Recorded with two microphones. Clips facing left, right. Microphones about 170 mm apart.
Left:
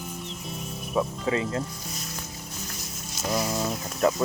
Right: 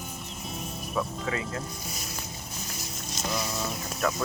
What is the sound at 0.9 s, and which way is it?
Speech, 30° left (ahead or behind).